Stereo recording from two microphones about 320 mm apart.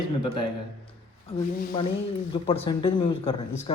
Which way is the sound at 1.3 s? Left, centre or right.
Centre.